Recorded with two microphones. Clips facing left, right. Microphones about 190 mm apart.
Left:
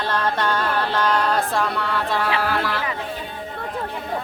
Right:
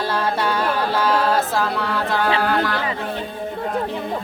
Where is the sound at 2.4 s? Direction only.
Centre (ahead or behind).